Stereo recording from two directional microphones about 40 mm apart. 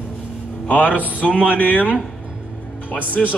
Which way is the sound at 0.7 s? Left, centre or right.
Left.